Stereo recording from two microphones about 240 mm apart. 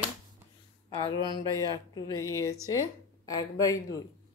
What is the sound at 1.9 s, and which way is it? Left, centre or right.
Speech, centre.